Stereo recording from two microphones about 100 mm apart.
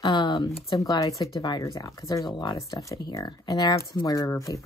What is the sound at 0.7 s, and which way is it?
Speech, 35° left (ahead or behind).